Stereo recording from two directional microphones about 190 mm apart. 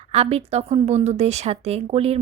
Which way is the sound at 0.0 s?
35° right (ahead or behind).